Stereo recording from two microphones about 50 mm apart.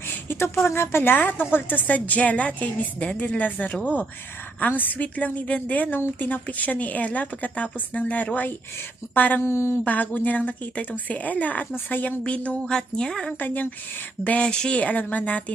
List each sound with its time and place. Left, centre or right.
0.3 s a woman's voice: left
1.9 s speech: left
9.4 s mantra: left
9.8 s speech: left
12.2 s a woman's voice: left
13.4 s speech: left
14.4 s a woman's voice: centre
14.8 s speech: left